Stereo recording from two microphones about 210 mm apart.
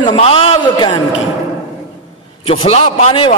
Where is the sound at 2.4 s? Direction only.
25° left (ahead or behind).